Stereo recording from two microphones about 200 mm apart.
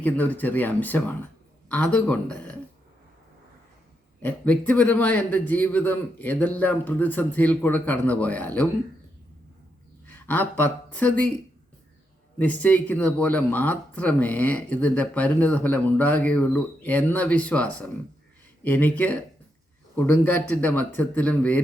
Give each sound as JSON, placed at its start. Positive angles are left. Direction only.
{"t": 0.0, "sound": "speech", "side_deg": 10}
{"t": 4.2, "sound": "speech", "side_deg": 10}
{"t": 10.1, "sound": "speech", "side_deg": 10}
{"t": 12.4, "sound": "speech", "side_deg": 10}